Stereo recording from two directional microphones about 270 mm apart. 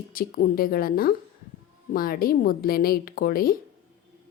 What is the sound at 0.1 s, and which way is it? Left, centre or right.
A woman's voice, left.